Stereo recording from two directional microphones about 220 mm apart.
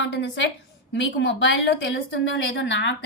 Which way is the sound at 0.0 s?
55° left (ahead or behind).